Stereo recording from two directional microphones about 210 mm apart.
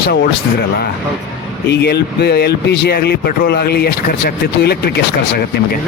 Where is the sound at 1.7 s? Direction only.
50° left (ahead or behind).